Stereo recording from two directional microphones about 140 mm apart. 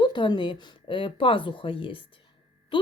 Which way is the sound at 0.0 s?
35° left (ahead or behind).